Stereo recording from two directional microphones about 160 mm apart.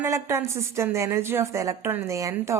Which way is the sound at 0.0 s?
15° right (ahead or behind).